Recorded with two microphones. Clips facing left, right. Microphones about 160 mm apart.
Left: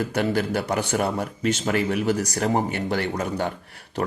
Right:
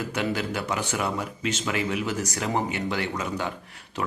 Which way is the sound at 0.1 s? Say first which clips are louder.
Left 5 dB; 45° left (ahead or behind).